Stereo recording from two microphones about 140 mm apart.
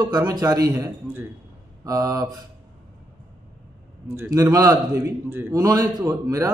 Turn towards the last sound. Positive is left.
turn(degrees=-25)  # may be behind; listen again after turning